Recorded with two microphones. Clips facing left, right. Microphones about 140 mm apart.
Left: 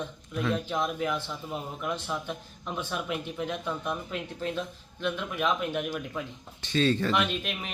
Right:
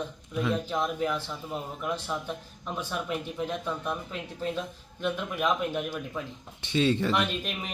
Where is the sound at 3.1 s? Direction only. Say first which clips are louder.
Right 1 dB; centre (ahead or behind).